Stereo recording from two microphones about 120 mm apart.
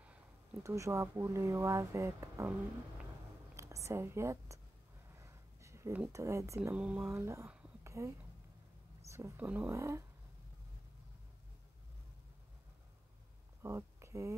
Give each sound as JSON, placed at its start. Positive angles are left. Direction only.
{"t": 0.7, "sound": "speech", "side_deg": -25}
{"t": 3.5, "sound": "a woman's voice", "side_deg": -25}
{"t": 5.1, "sound": "a sound", "side_deg": -25}
{"t": 6.1, "sound": "speech", "side_deg": -25}
{"t": 6.7, "sound": "speech", "side_deg": -10}
{"t": 7.1, "sound": "speech", "side_deg": -25}
{"t": 7.8, "sound": "whispering", "side_deg": -25}
{"t": 9.1, "sound": "a sound", "side_deg": -25}
{"t": 9.4, "sound": "speech", "side_deg": -15}
{"t": 9.8, "sound": "speech", "side_deg": -25}
{"t": 13.6, "sound": "a sound", "side_deg": -25}